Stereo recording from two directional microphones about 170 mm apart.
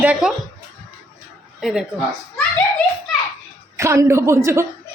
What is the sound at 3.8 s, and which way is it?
Speech, 15° right (ahead or behind).